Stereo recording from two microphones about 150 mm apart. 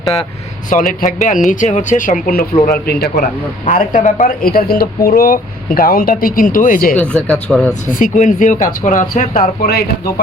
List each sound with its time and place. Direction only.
0.7 s speech: 55° left (ahead or behind); by 2.5 s 70° left (ahead or behind)
2.8 s a man's voice: 90° left
3.7 s speech: 60° left (ahead or behind)
6.9 s speech: 10° left (ahead or behind)
7.9 s speech: 65° left (ahead or behind)